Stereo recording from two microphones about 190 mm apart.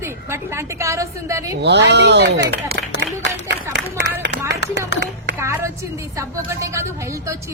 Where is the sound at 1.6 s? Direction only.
65° right (ahead or behind).